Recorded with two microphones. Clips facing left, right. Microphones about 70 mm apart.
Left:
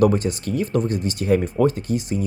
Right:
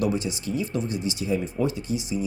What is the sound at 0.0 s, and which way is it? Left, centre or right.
Speech, left.